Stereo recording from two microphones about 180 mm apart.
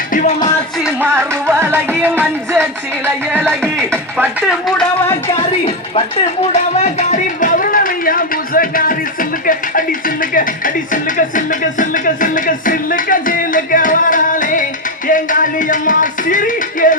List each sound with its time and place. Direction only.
0.1 s music: 50° left (ahead or behind)
1.1 s music: 15° right (ahead or behind)
3.8 s speech: 10° right (ahead or behind)
5.4 s speech: 30° left (ahead or behind)
6.5 s a sound: 40° left (ahead or behind)
9.5 s speech: 50° left (ahead or behind)
10.9 s music: 45° left (ahead or behind)